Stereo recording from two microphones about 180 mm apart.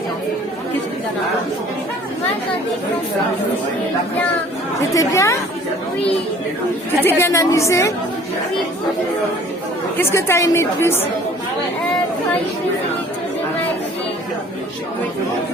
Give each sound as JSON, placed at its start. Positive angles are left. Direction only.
{"t": 4.8, "sound": "a woman's voice", "side_deg": 15}
{"t": 7.0, "sound": "a woman's voice", "side_deg": 10}
{"t": 10.0, "sound": "a woman's voice", "side_deg": 15}